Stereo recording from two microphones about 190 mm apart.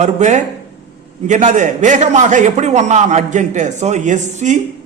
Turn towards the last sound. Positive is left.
turn(degrees=-40)  # may be behind; listen again after turning